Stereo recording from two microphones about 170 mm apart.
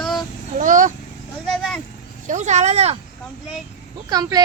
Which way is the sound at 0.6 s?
50° right (ahead or behind).